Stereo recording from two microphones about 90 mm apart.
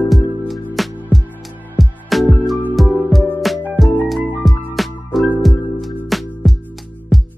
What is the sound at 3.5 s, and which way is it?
Music, centre (ahead or behind).